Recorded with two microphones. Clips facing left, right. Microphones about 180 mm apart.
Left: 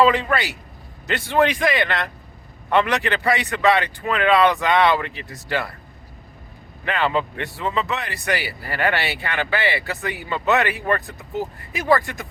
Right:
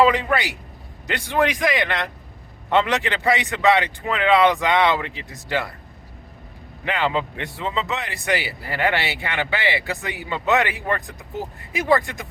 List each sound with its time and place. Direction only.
0.0 s a man's voice: 15° right (ahead or behind)
6.8 s a man's voice: 15° right (ahead or behind)